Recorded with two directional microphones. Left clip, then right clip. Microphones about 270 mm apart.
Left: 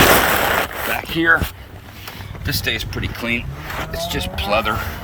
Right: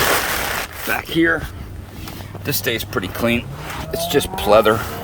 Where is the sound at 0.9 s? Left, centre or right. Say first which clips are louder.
Right 1 dB; centre.